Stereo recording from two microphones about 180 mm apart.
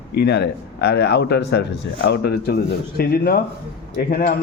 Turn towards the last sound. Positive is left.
turn(degrees=55)  # may be behind; listen again after turning